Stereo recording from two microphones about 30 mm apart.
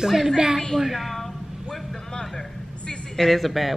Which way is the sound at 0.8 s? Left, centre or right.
Centre.